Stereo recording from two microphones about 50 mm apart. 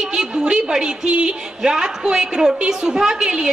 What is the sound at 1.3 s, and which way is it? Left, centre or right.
A woman's voice, centre.